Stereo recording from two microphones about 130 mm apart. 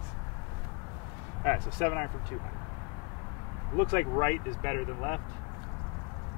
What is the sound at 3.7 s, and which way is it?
Speech, 20° left (ahead or behind).